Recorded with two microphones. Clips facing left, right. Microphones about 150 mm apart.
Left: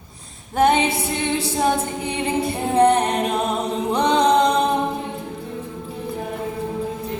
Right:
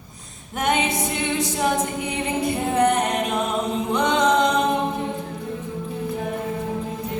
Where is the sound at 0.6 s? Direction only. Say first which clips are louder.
Left 5 dB; 30° left (ahead or behind).